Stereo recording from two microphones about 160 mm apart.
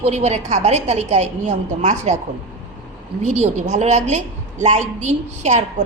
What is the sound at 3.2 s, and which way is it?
A woman's voice, 45° right (ahead or behind).